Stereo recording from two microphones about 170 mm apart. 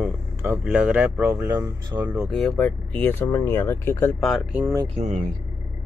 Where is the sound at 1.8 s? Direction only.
25° right (ahead or behind).